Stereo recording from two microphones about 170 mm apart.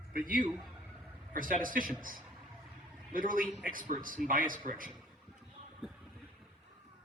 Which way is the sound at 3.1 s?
55° right (ahead or behind).